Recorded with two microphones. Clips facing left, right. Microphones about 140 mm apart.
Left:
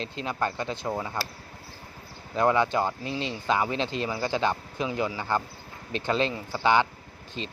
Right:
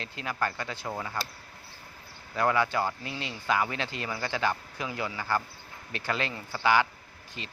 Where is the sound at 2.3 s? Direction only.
20° left (ahead or behind).